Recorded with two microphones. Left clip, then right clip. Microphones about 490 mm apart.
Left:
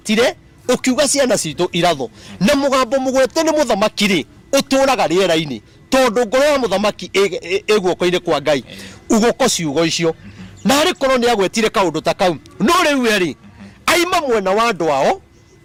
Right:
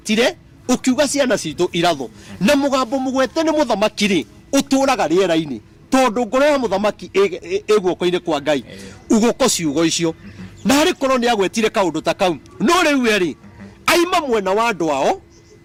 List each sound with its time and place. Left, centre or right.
0.0 s speech: left